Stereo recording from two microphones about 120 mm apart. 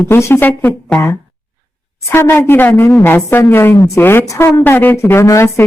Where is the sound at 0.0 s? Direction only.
25° left (ahead or behind).